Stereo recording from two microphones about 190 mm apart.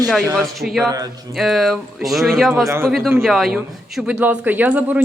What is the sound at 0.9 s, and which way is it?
Speech, 20° right (ahead or behind).